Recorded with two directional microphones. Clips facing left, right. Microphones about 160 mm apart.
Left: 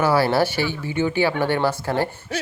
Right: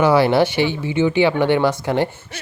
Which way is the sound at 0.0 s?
20° right (ahead or behind).